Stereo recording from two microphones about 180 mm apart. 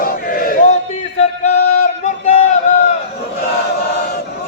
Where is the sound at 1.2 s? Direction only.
35° left (ahead or behind).